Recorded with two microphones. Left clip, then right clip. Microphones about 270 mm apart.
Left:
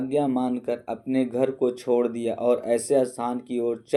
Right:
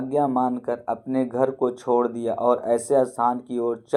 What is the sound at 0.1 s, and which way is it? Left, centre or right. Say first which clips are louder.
Speech: right 4 dB; centre.